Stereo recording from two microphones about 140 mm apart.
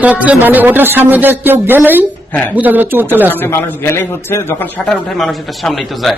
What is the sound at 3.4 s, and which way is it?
A man's voice, 15° left (ahead or behind).